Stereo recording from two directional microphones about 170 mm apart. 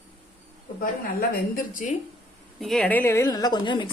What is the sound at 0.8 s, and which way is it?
Speech, 60° left (ahead or behind).